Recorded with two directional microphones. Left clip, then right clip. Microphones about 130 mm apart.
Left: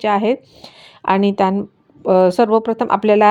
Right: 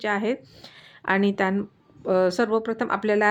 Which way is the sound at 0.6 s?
40° left (ahead or behind).